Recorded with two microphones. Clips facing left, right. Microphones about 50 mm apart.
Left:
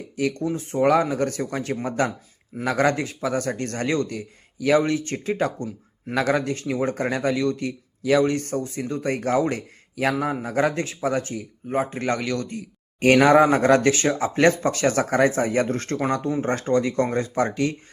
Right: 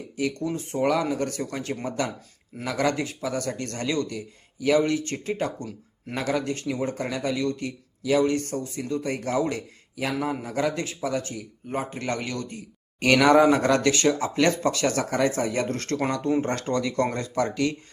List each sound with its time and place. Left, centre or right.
0.2 s speech: left
6.4 s speech: left
13.0 s speech: left